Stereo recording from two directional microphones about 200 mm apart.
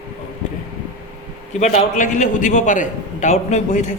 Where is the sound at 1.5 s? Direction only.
35° left (ahead or behind).